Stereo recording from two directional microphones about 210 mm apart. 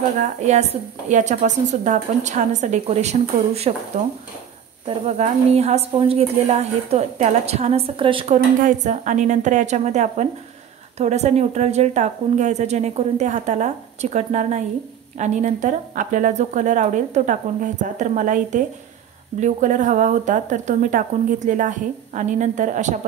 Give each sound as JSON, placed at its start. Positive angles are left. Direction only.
{"t": 0.2, "sound": "a woman's voice", "side_deg": -35}
{"t": 8.6, "sound": "a woman's voice", "side_deg": -35}